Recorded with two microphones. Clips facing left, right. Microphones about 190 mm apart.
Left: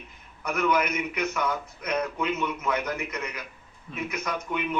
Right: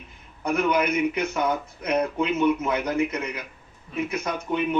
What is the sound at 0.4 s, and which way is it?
Speech, 30° right (ahead or behind).